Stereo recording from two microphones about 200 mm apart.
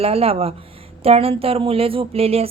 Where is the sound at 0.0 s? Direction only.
30° right (ahead or behind).